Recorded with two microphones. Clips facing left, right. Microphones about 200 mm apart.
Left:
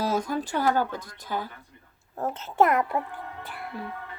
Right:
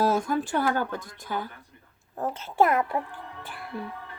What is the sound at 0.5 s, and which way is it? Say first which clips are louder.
Speech: left 3 dB; 50° right (ahead or behind).